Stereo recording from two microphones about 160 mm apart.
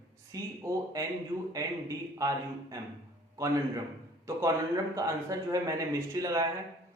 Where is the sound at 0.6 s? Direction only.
20° right (ahead or behind).